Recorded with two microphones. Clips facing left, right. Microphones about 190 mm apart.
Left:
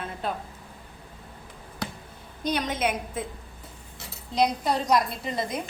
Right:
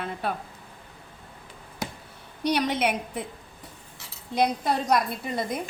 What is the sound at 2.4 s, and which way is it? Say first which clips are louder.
Speech: right 2 dB; 70° right (ahead or behind).